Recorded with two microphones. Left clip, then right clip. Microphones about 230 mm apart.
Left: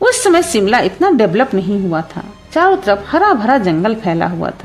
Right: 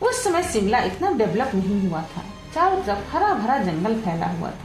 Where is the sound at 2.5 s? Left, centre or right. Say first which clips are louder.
Left 9 dB; left.